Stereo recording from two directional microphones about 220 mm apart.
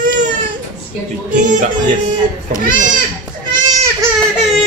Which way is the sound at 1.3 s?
35° right (ahead or behind).